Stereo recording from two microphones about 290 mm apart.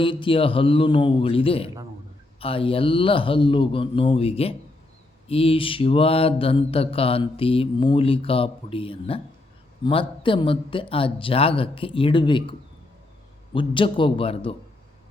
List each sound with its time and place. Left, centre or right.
0.0 s speech: centre
2.4 s mantra: centre
9.8 s speech: centre